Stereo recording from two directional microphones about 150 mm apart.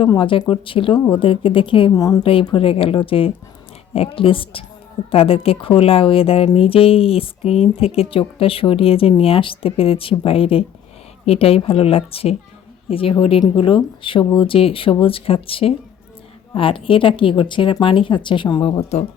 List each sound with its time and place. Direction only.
0.0 s speech: 35° left (ahead or behind)
1.9 s speech: 25° left (ahead or behind)
2.2 s speech: 35° left (ahead or behind)